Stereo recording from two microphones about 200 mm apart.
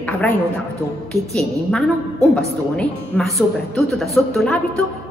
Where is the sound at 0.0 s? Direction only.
10° left (ahead or behind).